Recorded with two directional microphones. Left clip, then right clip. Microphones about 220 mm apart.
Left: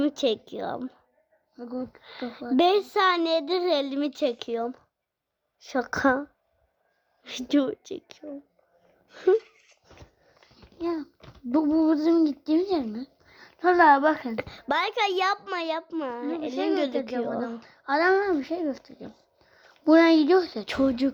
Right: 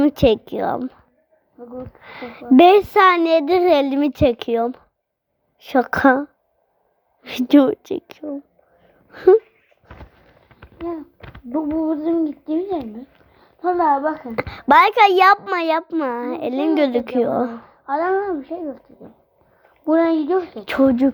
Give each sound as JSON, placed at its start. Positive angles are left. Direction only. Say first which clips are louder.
{"t": 0.0, "sound": "speech", "louder": "right 10 dB", "side_deg": -10}
{"t": 1.5, "sound": "speech", "louder": "right 2 dB", "side_deg": 55}
{"t": 2.0, "sound": "speech", "louder": "right 3 dB", "side_deg": -10}
{"t": 11.5, "sound": "a child's voice", "louder": "right 1 dB", "side_deg": 50}
{"t": 14.3, "sound": "speech", "louder": "right 14 dB", "side_deg": -10}
{"t": 15.9, "sound": "speech", "louder": "right 9 dB", "side_deg": 0}
{"t": 16.1, "sound": "speech", "louder": "right 7 dB", "side_deg": -10}
{"t": 17.8, "sound": "a child's voice", "louder": "right 2 dB", "side_deg": 50}
{"t": 20.7, "sound": "speech", "louder": "right 9 dB", "side_deg": 0}